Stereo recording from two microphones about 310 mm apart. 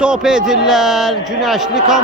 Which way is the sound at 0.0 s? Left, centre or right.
Centre.